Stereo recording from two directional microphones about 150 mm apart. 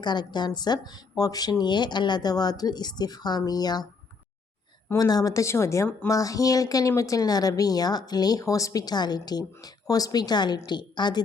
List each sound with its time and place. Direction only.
0.0 s speech: 30° left (ahead or behind)
4.9 s speech: 25° left (ahead or behind)